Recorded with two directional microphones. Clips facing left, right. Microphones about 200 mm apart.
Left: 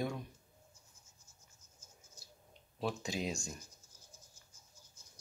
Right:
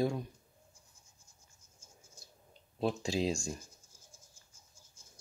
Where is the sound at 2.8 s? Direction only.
30° right (ahead or behind).